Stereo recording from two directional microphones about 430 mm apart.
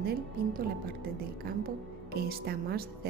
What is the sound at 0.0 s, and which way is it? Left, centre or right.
A woman's voice, centre.